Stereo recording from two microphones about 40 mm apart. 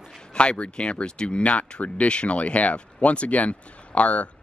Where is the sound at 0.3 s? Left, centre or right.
Left.